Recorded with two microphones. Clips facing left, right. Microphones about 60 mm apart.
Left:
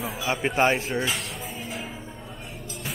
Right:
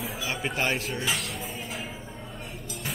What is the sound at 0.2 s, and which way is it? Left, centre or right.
Speech, centre.